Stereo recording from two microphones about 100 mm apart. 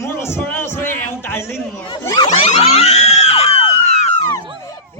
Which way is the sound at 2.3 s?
85° left.